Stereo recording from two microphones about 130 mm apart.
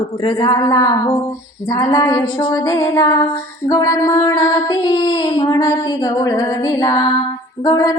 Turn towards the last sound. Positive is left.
turn(degrees=30)  # may be behind; listen again after turning